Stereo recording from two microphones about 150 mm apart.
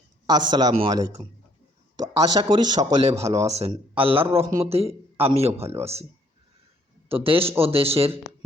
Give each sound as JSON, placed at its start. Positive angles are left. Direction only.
{"t": 0.3, "sound": "a man's voice", "side_deg": -30}
{"t": 0.9, "sound": "speech", "side_deg": -25}
{"t": 2.4, "sound": "speech", "side_deg": -30}
{"t": 3.0, "sound": "a man's voice", "side_deg": -45}
{"t": 7.1, "sound": "a man's voice", "side_deg": -40}